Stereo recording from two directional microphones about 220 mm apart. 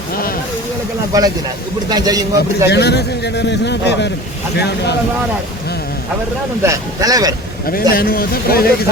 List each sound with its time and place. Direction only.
1.9 s a man's voice: 15° right (ahead or behind)
2.6 s a man's voice: 50° left (ahead or behind)
6.6 s a man's voice: 15° right (ahead or behind)
7.7 s a man's voice: 40° left (ahead or behind)